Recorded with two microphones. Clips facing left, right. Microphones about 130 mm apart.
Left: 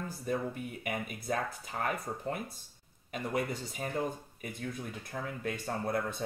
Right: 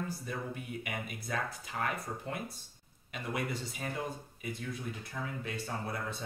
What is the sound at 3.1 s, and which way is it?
Speech, 40° left (ahead or behind).